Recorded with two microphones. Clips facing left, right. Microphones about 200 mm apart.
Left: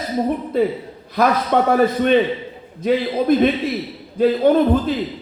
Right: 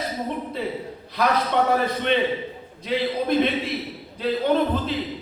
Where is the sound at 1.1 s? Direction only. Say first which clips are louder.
Left 5 dB; 50° left (ahead or behind).